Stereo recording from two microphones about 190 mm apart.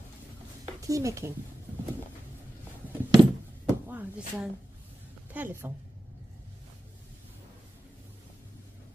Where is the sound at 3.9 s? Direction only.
10° right (ahead or behind).